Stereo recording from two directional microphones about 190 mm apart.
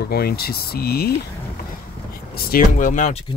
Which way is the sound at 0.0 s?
55° left (ahead or behind).